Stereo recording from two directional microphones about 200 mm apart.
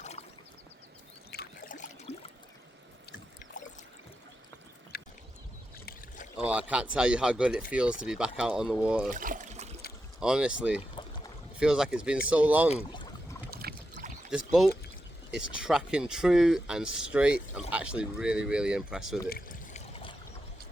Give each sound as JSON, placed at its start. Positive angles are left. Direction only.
{"t": 0.0, "sound": "boat", "side_deg": 35}
{"t": 1.3, "sound": "trickle", "side_deg": 45}
{"t": 3.6, "sound": "boat", "side_deg": 45}
{"t": 4.9, "sound": "a sound", "side_deg": 50}
{"t": 6.3, "sound": "speech", "side_deg": -5}
{"t": 9.0, "sound": "trickle", "side_deg": -40}
{"t": 10.2, "sound": "speech", "side_deg": -5}
{"t": 11.0, "sound": "boat", "side_deg": 25}
{"t": 11.6, "sound": "speech", "side_deg": -5}
{"t": 12.7, "sound": "speech", "side_deg": 25}
{"t": 13.5, "sound": "boat", "side_deg": -50}
{"t": 14.3, "sound": "speech", "side_deg": 0}
{"t": 19.3, "sound": "pour", "side_deg": 45}
{"t": 19.9, "sound": "boat", "side_deg": 25}